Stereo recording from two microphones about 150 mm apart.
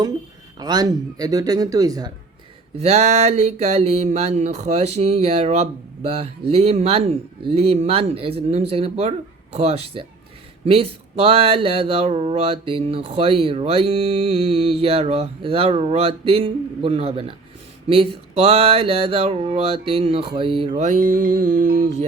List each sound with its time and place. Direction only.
0.6 s speech: 25° right (ahead or behind)
2.7 s a sound: 45° right (ahead or behind)
6.5 s speech: 40° right (ahead or behind)
20.7 s music: 55° right (ahead or behind)